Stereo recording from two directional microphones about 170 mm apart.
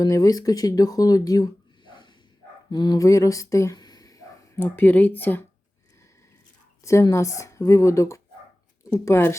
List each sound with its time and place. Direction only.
0.0 s speech: 20° left (ahead or behind)
6.8 s speech: 15° left (ahead or behind)